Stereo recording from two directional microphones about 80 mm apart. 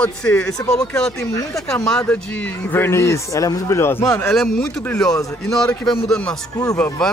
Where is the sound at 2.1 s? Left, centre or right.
Centre; by 5.8 s left.